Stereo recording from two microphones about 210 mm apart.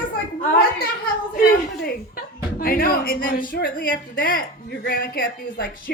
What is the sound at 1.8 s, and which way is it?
Music, 45° left (ahead or behind).